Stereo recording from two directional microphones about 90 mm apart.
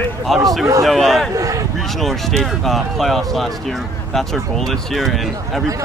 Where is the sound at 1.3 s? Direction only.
40° right (ahead or behind).